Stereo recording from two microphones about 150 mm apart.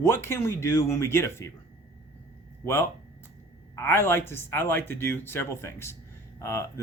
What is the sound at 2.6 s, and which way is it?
Speech, 15° left (ahead or behind).